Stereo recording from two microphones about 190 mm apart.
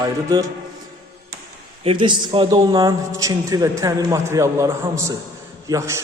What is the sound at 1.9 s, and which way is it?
A man's voice, 25° right (ahead or behind).